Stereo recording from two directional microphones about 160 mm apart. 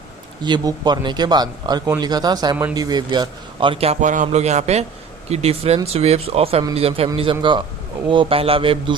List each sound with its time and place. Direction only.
0.4 s speech: 25° right (ahead or behind)
4.0 s a man's voice: 50° right (ahead or behind); by 9.0 s 35° right (ahead or behind)